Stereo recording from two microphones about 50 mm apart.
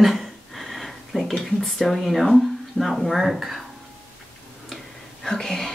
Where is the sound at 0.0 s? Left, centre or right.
Centre.